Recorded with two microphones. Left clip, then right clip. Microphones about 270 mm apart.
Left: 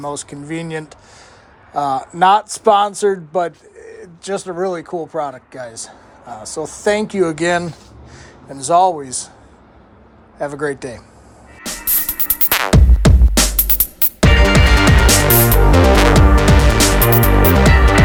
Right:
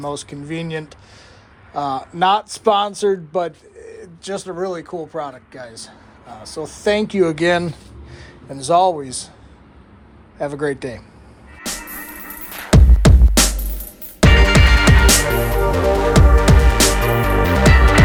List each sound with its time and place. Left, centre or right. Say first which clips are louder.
0.0 s speech: left 1 dB; centre
1.7 s speech: left 4 dB; centre
3.8 s pigeon: left 1 dB; centre
4.3 s speech: left 4 dB; centre
10.4 s speech: left 1 dB; centre
11.6 s music: left 3 dB; centre